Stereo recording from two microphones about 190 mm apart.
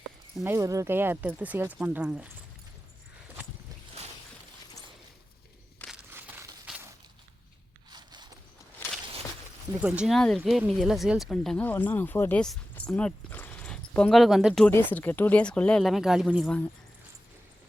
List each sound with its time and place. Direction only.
0.4 s speech: 15° right (ahead or behind)
6.1 s a sound: 10° right (ahead or behind)
7.9 s zipper: 20° right (ahead or behind)
9.8 s speech: 5° right (ahead or behind)